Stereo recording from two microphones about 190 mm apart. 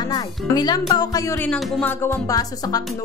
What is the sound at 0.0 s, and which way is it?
Speech, 20° left (ahead or behind).